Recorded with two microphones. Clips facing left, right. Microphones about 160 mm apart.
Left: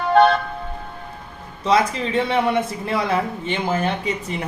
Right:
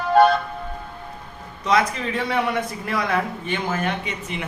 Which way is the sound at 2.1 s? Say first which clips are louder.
Left 4 dB; 25° left (ahead or behind).